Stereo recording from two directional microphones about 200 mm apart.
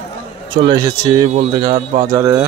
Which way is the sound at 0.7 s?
20° right (ahead or behind).